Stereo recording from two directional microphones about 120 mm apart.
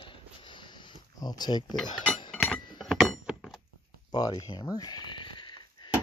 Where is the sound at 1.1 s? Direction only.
35° left (ahead or behind).